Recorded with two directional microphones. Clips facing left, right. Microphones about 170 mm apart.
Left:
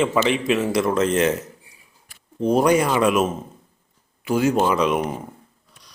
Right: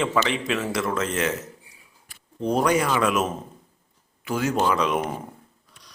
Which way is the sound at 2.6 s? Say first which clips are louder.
Left 3 dB; 25° left (ahead or behind).